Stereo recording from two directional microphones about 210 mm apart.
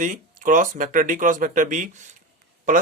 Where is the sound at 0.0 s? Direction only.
40° right (ahead or behind).